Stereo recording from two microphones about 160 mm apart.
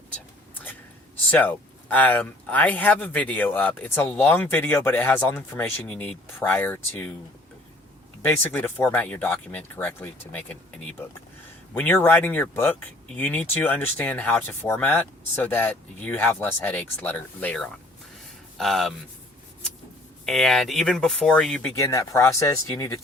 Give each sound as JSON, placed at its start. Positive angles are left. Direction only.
{"t": 1.3, "sound": "speech", "side_deg": 10}
{"t": 8.2, "sound": "speech", "side_deg": 10}
{"t": 20.2, "sound": "speech", "side_deg": 0}
{"t": 21.8, "sound": "speech", "side_deg": 20}